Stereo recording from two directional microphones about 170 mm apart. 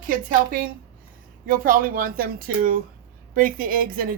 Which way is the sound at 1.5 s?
55° right (ahead or behind).